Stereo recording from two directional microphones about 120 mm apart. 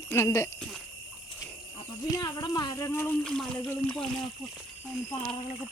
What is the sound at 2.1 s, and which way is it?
Speech, 30° left (ahead or behind).